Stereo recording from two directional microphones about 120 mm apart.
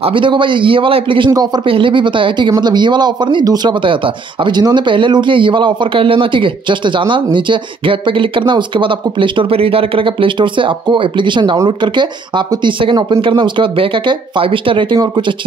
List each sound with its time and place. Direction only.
0.0 s speech: 45° right (ahead or behind)
1.3 s speech: 35° right (ahead or behind)